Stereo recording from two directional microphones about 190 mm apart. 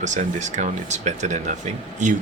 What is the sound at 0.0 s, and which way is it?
Speech, 40° right (ahead or behind).